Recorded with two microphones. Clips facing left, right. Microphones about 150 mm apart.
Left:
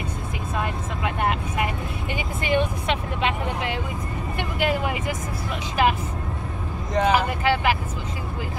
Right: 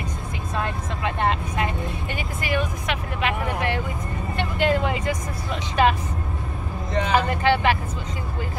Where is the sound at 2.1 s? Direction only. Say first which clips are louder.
Left 4 dB; 25° left (ahead or behind).